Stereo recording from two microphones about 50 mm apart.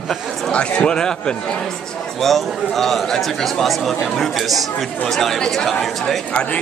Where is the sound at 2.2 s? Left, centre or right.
Centre.